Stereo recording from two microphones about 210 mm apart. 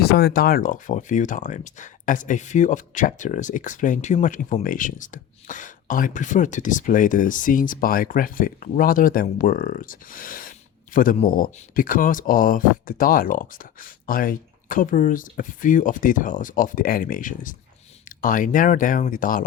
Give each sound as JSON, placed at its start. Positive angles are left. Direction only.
{"t": 0.0, "sound": "speech", "side_deg": 50}